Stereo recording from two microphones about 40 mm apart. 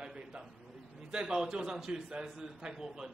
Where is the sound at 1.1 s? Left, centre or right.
Centre.